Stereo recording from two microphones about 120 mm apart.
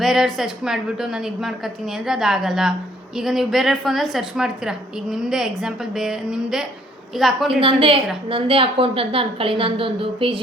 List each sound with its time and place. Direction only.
0.0 s a woman's voice: centre (ahead or behind)
7.6 s a woman's voice: 50° right (ahead or behind)